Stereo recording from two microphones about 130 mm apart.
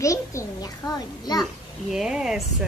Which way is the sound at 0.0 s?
25° left (ahead or behind).